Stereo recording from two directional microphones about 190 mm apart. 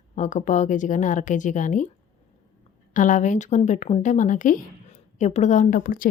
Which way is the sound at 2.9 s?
40° left (ahead or behind).